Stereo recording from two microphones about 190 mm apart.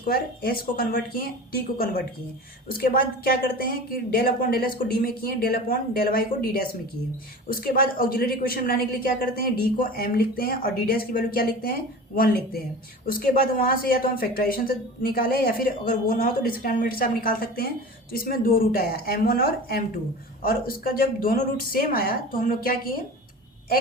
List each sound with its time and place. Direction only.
0.1 s a woman's voice: 50° left (ahead or behind)